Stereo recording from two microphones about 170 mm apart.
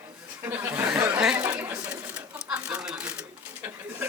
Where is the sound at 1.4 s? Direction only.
20° right (ahead or behind).